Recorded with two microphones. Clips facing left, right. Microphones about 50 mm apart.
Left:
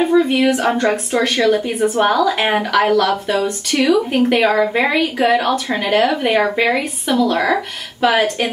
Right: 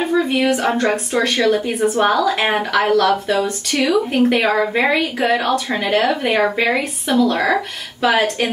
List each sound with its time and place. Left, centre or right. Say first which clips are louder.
0.0 s a woman's voice: left 3 dB; centre
3.7 s speech: left 2 dB; left
4.3 s a woman's voice: left 2 dB; centre